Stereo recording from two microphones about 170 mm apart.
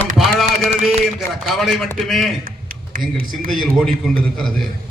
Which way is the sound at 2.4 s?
55° right (ahead or behind).